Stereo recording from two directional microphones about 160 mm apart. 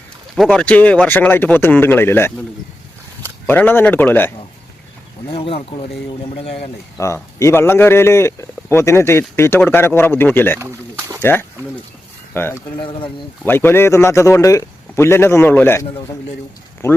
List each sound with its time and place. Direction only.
0.3 s speech: 5° left (ahead or behind)
3.4 s speech: 10° left (ahead or behind)
5.3 s speech: 35° left (ahead or behind)
6.9 s speech: 20° left (ahead or behind)
12.8 s speech: 35° left (ahead or behind)
13.4 s speech: 10° left (ahead or behind)